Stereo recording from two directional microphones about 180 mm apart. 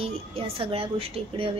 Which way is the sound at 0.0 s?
30° right (ahead or behind).